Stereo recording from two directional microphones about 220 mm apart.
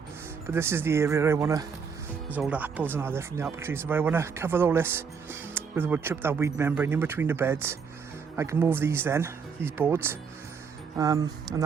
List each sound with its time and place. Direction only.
0.4 s speech: 10° right (ahead or behind)